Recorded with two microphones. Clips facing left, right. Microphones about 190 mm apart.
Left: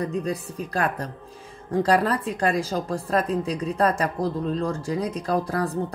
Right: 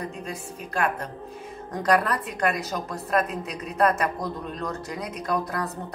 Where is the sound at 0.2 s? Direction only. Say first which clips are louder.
Left 6 dB; 35° left (ahead or behind).